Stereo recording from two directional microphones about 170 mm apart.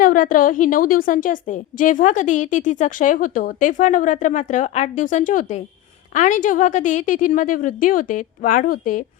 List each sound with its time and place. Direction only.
0.0 s a woman's voice: 55° left (ahead or behind)